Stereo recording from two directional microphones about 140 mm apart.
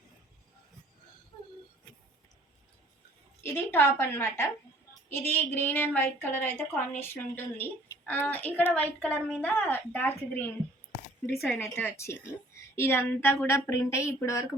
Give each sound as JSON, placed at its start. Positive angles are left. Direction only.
{"t": 3.4, "sound": "a woman's voice", "side_deg": 15}
{"t": 11.3, "sound": "speech", "side_deg": 0}
{"t": 11.6, "sound": "a woman's voice", "side_deg": 15}